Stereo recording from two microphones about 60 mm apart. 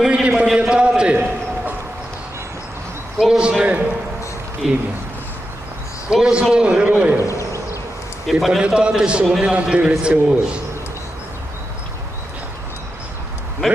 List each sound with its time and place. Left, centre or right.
0.1 s a sound: centre
3.2 s a man's voice: centre
3.6 s a man's voice: right
4.6 s a man's voice: centre
6.1 s a man's voice: centre
6.5 s a man's voice: centre
6.8 s a man's voice: right
7.2 s a sound: left
8.3 s a man's voice: centre